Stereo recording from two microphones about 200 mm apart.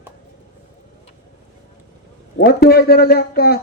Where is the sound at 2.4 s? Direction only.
50° left (ahead or behind).